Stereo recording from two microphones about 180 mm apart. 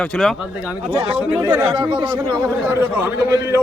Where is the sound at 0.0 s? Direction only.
5° left (ahead or behind).